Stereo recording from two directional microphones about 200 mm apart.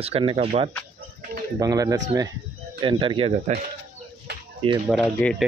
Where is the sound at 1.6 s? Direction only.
15° right (ahead or behind).